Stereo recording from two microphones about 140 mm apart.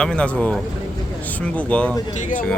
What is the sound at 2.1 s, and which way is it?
Speech, 60° left (ahead or behind).